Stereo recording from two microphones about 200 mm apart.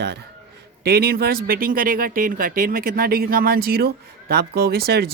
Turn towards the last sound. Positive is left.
turn(degrees=-50)  # may be behind; listen again after turning